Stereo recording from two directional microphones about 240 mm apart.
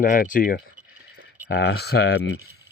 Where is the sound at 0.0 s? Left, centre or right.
Left.